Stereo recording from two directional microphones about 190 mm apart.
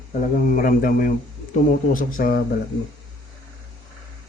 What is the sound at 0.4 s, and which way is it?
A man's voice, 45° left (ahead or behind).